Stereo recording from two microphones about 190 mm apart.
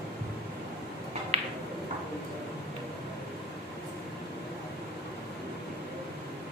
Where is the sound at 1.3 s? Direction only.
35° right (ahead or behind).